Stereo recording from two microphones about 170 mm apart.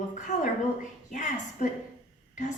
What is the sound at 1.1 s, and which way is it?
Speech, 50° left (ahead or behind).